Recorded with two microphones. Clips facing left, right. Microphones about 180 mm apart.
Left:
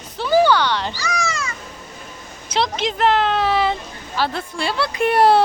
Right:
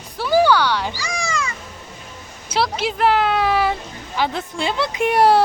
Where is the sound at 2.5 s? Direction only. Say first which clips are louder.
Even; 10° right (ahead or behind).